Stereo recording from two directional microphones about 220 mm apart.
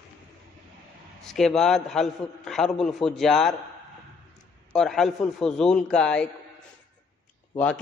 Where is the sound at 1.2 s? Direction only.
Centre (ahead or behind).